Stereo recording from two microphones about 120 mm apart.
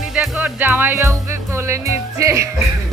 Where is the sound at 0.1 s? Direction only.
10° right (ahead or behind).